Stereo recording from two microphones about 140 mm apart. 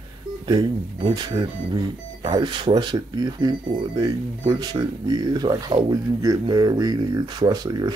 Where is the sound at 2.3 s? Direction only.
30° right (ahead or behind).